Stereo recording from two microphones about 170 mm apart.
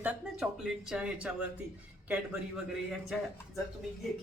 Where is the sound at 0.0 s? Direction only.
5° right (ahead or behind).